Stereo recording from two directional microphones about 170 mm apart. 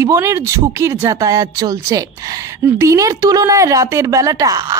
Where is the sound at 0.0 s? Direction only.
15° right (ahead or behind).